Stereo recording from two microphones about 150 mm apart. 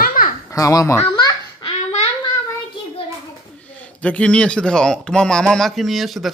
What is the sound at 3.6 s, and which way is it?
A man's voice, 10° left (ahead or behind).